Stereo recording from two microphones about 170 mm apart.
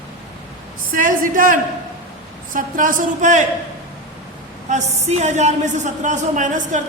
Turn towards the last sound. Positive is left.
turn(degrees=-45)  # may be behind; listen again after turning